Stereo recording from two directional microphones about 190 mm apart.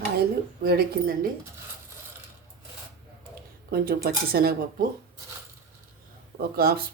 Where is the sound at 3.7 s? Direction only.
50° right (ahead or behind).